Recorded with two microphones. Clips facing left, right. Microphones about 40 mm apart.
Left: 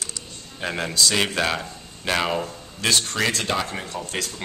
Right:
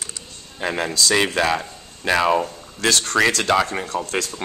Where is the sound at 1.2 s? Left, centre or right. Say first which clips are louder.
Right 4 dB; centre.